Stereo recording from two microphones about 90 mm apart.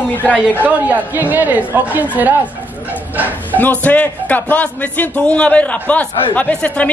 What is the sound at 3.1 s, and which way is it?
Bow-wow, 20° right (ahead or behind).